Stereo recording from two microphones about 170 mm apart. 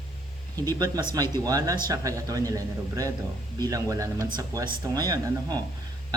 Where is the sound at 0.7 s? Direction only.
20° right (ahead or behind).